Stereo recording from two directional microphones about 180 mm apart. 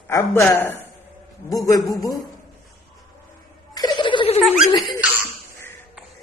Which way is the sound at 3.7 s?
25° left (ahead or behind).